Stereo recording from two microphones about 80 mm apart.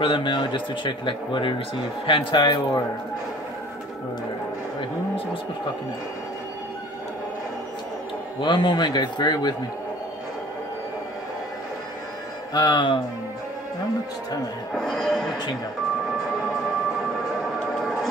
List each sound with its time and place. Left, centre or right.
0.1 s speech: left
8.4 s a man's voice: left
12.5 s speech: left
14.7 s speech: centre